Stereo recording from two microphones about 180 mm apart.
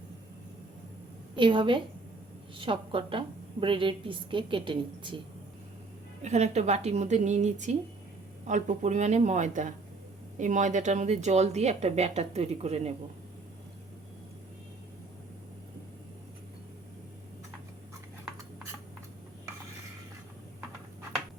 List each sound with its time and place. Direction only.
1.4 s a woman's voice: 25° right (ahead or behind)
6.2 s speech: 40° right (ahead or behind)